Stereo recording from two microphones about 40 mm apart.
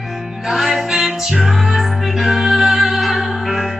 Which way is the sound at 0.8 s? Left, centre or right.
Centre.